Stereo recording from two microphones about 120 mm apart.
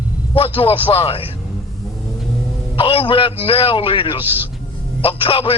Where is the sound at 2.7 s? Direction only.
50° left (ahead or behind).